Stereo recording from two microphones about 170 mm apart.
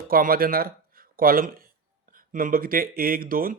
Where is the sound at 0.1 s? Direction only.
60° right (ahead or behind).